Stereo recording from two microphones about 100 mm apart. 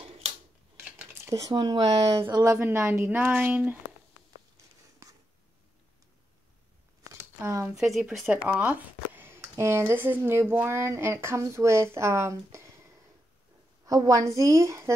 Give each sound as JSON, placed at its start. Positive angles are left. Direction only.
{"t": 0.7, "sound": "a sound", "side_deg": -25}
{"t": 1.5, "sound": "a woman's voice", "side_deg": -45}
{"t": 5.0, "sound": "a sound", "side_deg": -35}
{"t": 7.7, "sound": "speech", "side_deg": 0}
{"t": 8.5, "sound": "speech", "side_deg": -15}
{"t": 13.8, "sound": "a woman's voice", "side_deg": -35}